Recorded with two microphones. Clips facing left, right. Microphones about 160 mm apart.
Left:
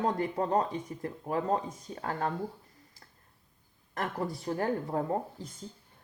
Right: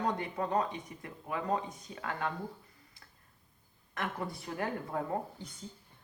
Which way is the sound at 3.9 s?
40° left (ahead or behind).